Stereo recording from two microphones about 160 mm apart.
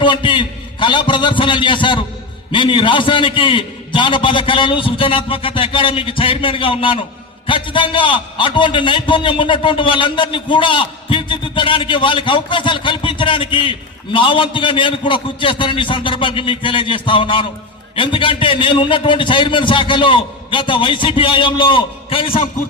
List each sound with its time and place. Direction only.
0.0 s a man's voice: 30° left (ahead or behind)